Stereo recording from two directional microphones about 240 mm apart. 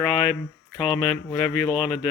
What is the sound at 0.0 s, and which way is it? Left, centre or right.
Speech, centre.